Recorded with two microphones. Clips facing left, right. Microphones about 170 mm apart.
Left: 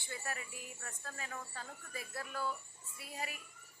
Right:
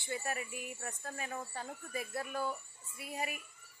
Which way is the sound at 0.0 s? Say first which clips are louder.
Right 6 dB; 20° right (ahead or behind).